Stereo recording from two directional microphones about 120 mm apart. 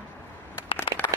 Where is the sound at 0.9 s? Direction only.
30° right (ahead or behind).